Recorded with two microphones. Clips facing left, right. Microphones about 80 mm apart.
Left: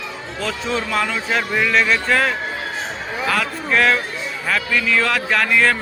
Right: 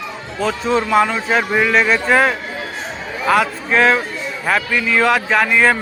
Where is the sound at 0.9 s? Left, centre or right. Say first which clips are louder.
Right 6 dB; right.